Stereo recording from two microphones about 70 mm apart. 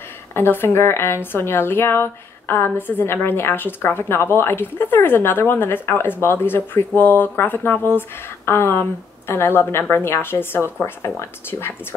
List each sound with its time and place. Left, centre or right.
0.3 s a woman's voice: left